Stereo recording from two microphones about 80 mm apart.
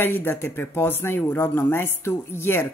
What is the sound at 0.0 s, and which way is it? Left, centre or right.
Speech, left.